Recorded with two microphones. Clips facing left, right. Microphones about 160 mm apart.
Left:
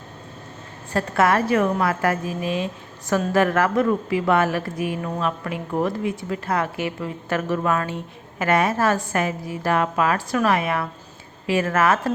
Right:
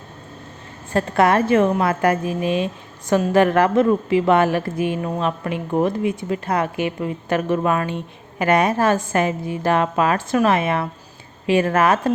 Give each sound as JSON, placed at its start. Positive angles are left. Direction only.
{"t": 0.9, "sound": "a woman's voice", "side_deg": -20}